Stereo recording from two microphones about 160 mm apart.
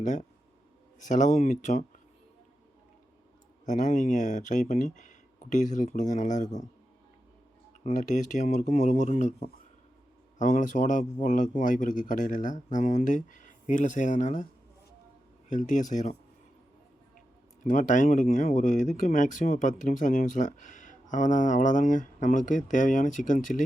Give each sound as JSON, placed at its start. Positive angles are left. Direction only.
{"t": 0.0, "sound": "speech", "side_deg": 50}
{"t": 3.7, "sound": "speech", "side_deg": 50}
{"t": 7.9, "sound": "speech", "side_deg": 50}
{"t": 15.4, "sound": "speech", "side_deg": 50}
{"t": 17.2, "sound": "speech", "side_deg": 50}